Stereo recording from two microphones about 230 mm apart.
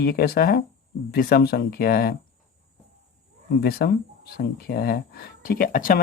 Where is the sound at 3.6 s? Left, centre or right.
Left.